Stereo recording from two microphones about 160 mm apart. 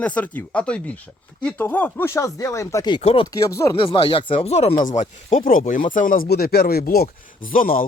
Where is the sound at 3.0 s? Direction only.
40° left (ahead or behind).